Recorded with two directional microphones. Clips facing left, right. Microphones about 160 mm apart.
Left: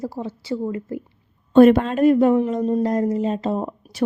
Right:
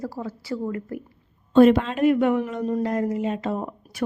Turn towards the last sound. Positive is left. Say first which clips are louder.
# left 4 dB
turn(degrees=30)  # may be behind; listen again after turning